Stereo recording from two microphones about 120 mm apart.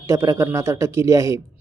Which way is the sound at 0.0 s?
25° right (ahead or behind).